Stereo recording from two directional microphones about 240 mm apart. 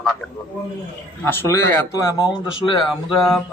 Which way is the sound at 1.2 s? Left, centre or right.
Centre.